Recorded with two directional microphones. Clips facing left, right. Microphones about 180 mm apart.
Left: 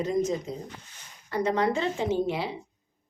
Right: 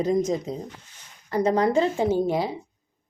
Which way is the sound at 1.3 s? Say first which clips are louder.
Right 4 dB; 40° right (ahead or behind).